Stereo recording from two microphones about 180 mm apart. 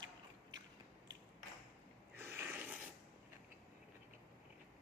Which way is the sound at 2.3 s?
15° right (ahead or behind).